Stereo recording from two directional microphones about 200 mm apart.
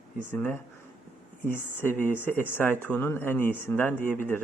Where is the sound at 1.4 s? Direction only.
40° right (ahead or behind).